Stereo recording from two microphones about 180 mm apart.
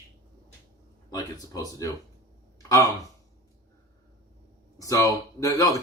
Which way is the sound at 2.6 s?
20° left (ahead or behind).